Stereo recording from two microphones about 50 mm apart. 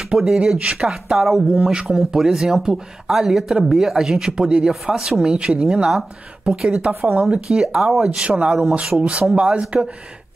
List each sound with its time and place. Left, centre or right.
0.1 s speech: centre
0.6 s speech: right
0.8 s speech: centre
1.5 s speech: centre
4.9 s speech: centre; by 7.4 s right
7.4 s speech: centre